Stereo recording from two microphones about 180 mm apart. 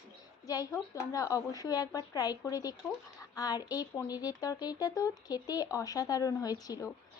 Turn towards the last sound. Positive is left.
turn(degrees=20)  # may be behind; listen again after turning